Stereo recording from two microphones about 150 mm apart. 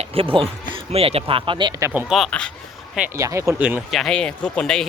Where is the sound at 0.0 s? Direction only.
40° right (ahead or behind).